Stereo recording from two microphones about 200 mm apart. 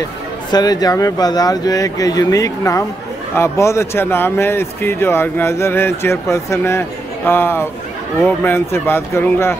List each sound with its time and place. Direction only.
0.5 s speech: 20° left (ahead or behind)